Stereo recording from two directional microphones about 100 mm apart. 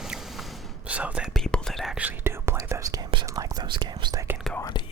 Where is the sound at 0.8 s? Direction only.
15° right (ahead or behind).